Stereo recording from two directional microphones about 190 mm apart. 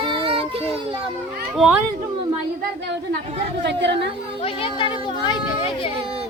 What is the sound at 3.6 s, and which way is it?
Speech, 70° right (ahead or behind).